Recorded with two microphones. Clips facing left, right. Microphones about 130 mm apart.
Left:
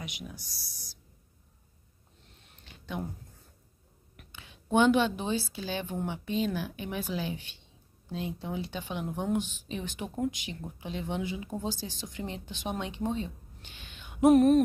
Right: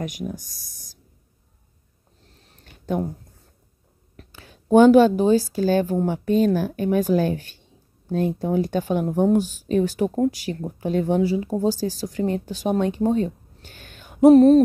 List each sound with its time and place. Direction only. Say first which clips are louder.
0.0 s speech: right 13 dB; 45° right (ahead or behind)
2.2 s a sound: right 4 dB; 35° right (ahead or behind)
4.2 s speech: right 6 dB; 40° right (ahead or behind)